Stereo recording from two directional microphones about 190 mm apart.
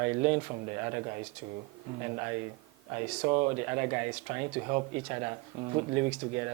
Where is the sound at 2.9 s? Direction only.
25° right (ahead or behind).